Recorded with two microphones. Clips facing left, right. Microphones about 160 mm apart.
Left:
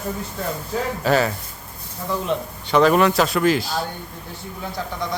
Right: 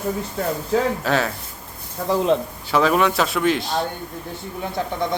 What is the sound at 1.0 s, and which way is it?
Speech, centre (ahead or behind).